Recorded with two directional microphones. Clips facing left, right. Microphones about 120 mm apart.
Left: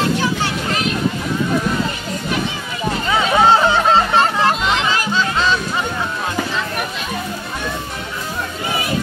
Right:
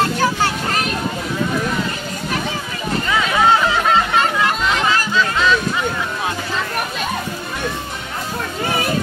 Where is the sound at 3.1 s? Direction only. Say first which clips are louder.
Left 2 dB; 30° left (ahead or behind).